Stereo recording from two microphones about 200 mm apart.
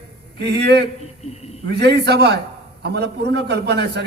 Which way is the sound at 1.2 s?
30° left (ahead or behind).